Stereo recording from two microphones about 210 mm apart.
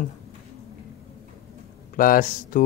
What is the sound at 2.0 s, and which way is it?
Speech, 40° left (ahead or behind).